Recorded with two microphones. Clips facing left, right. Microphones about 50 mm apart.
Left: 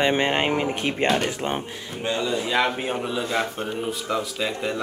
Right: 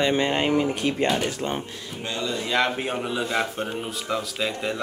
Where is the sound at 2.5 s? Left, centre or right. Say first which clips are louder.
Right 2 dB; centre.